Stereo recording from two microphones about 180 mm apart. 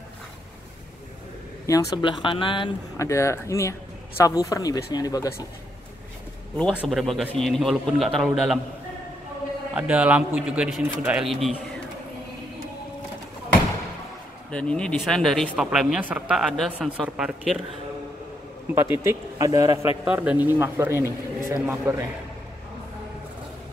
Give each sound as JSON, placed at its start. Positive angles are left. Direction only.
{"t": 1.7, "sound": "speech", "side_deg": 25}
{"t": 6.7, "sound": "speech", "side_deg": -5}
{"t": 9.8, "sound": "a man's voice", "side_deg": -5}
{"t": 14.5, "sound": "speech", "side_deg": 5}
{"t": 18.8, "sound": "a man's voice", "side_deg": -15}
{"t": 20.1, "sound": "a man's voice", "side_deg": -10}